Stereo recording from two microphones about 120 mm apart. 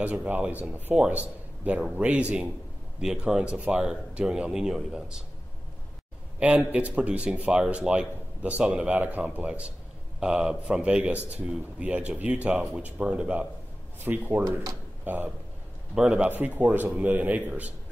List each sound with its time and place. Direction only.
0.0 s speech: 15° right (ahead or behind)
6.7 s speech: 10° right (ahead or behind)